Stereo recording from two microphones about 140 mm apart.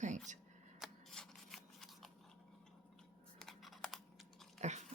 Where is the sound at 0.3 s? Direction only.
60° right (ahead or behind).